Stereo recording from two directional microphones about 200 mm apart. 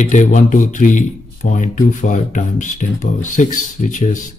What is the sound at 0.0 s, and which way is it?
Speech, 40° left (ahead or behind).